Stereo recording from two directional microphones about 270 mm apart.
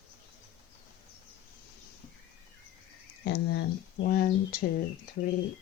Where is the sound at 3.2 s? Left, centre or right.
Left.